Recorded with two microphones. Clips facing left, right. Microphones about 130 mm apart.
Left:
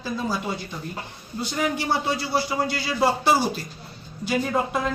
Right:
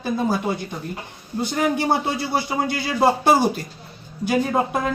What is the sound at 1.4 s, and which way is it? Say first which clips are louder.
Speech: right 4 dB; 50° right (ahead or behind).